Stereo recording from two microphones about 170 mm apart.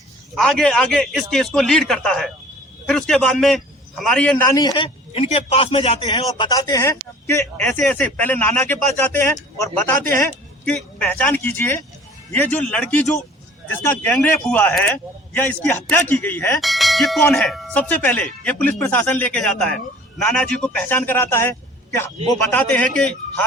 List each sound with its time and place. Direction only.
0.3 s a man's voice: 5° left (ahead or behind)
4.4 s a man's voice: 20° left (ahead or behind)
6.0 s a man's voice: 25° left (ahead or behind)
14.4 s speech: 10° left (ahead or behind)
16.6 s bell: centre (ahead or behind)
17.3 s speech: centre (ahead or behind)
22.5 s speech: 10° left (ahead or behind)